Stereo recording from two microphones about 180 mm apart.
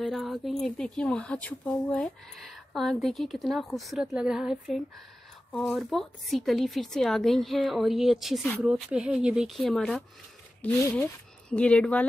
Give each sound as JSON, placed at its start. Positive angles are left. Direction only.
{"t": 0.0, "sound": "speech", "side_deg": 0}